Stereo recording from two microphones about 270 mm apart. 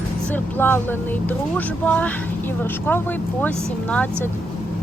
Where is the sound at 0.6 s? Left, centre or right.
Centre.